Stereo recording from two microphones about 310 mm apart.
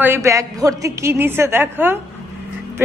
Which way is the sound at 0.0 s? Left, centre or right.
Centre.